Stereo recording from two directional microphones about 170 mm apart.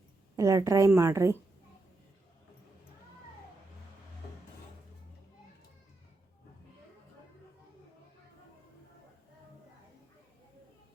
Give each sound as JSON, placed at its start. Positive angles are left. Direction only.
{"t": 0.3, "sound": "a woman's voice", "side_deg": -15}